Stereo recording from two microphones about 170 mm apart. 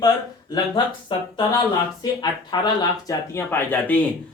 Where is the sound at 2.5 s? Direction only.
25° left (ahead or behind).